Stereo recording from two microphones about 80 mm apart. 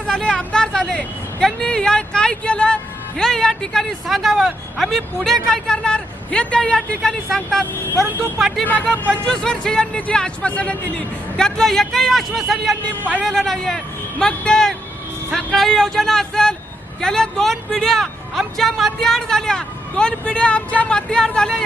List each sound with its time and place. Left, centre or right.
0.1 s vehicle: centre
3.2 s speech: centre
8.6 s speech: centre
9.2 s speech: centre